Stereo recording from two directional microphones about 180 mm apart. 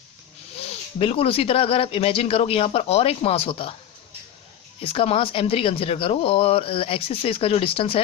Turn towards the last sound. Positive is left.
turn(degrees=30)  # may be behind; listen again after turning